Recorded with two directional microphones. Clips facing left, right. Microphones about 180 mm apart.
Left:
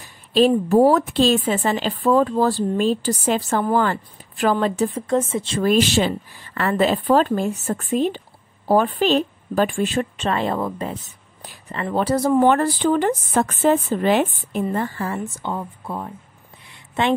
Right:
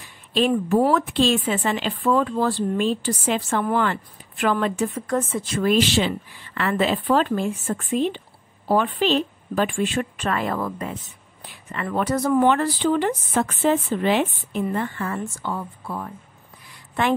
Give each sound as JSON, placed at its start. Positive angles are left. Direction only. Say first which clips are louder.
{"t": 0.7, "sound": "speech", "louder": "left 4 dB", "side_deg": 35}
{"t": 5.6, "sound": "speech", "louder": "left 2 dB", "side_deg": 45}
{"t": 10.1, "sound": "a woman's voice", "louder": "left 3 dB", "side_deg": 25}
{"t": 12.4, "sound": "speech", "louder": "left 2 dB", "side_deg": 45}
{"t": 15.2, "sound": "a woman's voice", "louder": "left 2 dB", "side_deg": 20}
{"t": 16.6, "sound": "a sound", "louder": "left 2 dB", "side_deg": 25}